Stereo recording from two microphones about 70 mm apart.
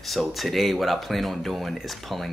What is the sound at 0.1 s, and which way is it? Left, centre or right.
Speech, centre.